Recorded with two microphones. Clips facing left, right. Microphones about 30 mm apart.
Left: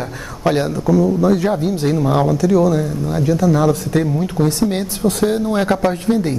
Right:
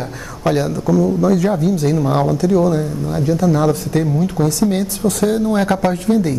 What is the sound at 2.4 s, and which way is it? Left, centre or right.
Speech, right.